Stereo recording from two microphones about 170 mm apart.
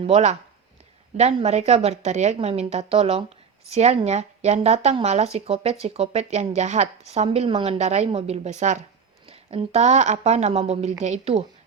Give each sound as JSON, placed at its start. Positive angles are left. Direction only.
{"t": 0.0, "sound": "a woman's voice", "side_deg": -40}